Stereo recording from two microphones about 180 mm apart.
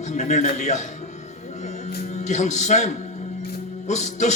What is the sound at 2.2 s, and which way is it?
Speech, 40° left (ahead or behind).